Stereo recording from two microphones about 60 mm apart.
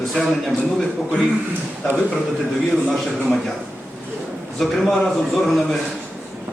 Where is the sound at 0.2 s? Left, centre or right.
Centre.